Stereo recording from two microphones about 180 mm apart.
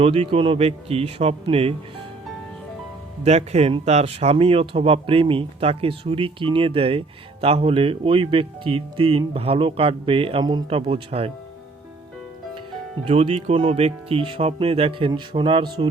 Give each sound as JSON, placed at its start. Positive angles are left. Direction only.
{"t": 0.0, "sound": "speech", "side_deg": -35}
{"t": 3.2, "sound": "speech", "side_deg": -35}
{"t": 13.1, "sound": "speech", "side_deg": -35}